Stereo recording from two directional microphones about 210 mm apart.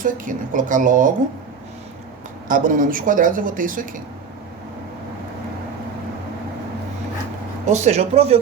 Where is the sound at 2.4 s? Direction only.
40° right (ahead or behind).